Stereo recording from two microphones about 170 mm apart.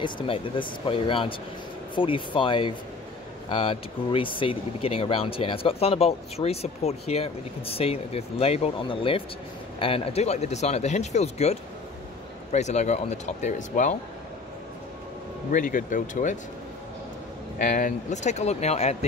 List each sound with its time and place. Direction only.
0.0 s speech: 30° left (ahead or behind)
12.5 s speech: 40° left (ahead or behind)
15.5 s speech: 50° left (ahead or behind)
17.6 s speech: 50° left (ahead or behind)